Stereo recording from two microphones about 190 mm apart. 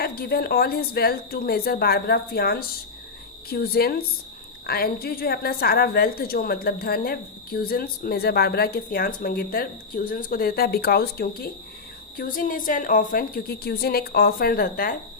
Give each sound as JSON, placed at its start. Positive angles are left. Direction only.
{"t": 0.0, "sound": "a woman's voice", "side_deg": 55}